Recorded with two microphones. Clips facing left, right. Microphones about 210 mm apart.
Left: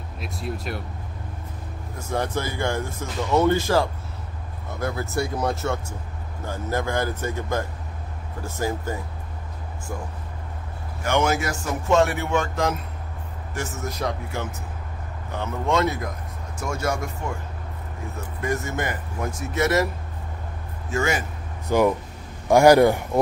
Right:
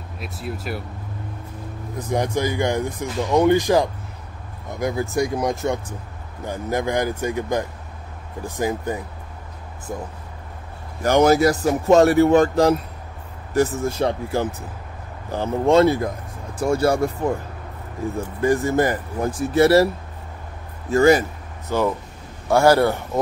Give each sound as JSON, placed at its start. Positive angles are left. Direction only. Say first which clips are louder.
{"t": 0.2, "sound": "speech", "louder": "right 1 dB", "side_deg": -5}
{"t": 2.0, "sound": "speech", "louder": "right 4 dB", "side_deg": -15}
{"t": 11.0, "sound": "speech", "louder": "right 7 dB", "side_deg": -35}
{"t": 20.9, "sound": "speech", "louder": "right 10 dB", "side_deg": -35}
{"t": 21.6, "sound": "a man's voice", "louder": "left 2 dB", "side_deg": 15}